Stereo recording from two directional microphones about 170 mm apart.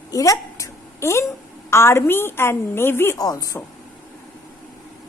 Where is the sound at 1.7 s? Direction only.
15° left (ahead or behind).